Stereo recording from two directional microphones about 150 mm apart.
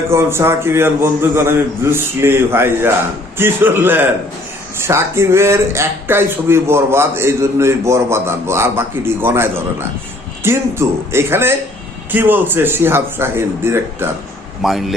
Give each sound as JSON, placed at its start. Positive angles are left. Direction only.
{"t": 0.1, "sound": "speech", "side_deg": -15}
{"t": 14.6, "sound": "a man's voice", "side_deg": 0}